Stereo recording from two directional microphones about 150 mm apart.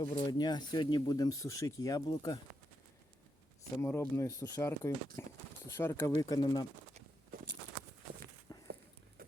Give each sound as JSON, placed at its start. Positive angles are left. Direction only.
{"t": 0.0, "sound": "speech", "side_deg": 30}
{"t": 3.8, "sound": "speech", "side_deg": 15}
{"t": 8.5, "sound": "walk", "side_deg": 25}